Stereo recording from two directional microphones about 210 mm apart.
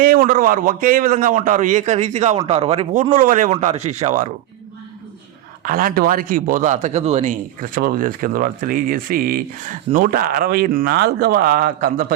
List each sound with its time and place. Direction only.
0.0 s speech: 45° right (ahead or behind)
5.6 s speech: 40° right (ahead or behind)